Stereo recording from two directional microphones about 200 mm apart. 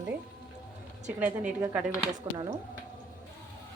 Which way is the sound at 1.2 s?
10° right (ahead or behind).